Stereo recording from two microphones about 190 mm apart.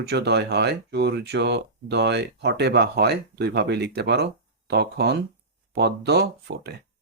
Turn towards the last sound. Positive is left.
turn(degrees=-60)  # may be behind; listen again after turning